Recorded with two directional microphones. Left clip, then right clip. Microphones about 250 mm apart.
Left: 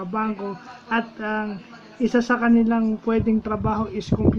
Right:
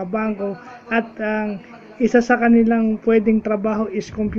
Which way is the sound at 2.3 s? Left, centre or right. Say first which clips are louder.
Right 4 dB; centre.